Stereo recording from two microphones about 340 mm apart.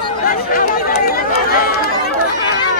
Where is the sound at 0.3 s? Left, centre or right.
Left.